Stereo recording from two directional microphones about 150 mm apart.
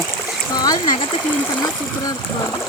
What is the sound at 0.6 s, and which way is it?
Splash, 25° left (ahead or behind).